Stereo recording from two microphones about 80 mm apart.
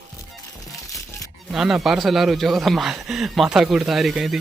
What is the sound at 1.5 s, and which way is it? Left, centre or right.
Speech, centre.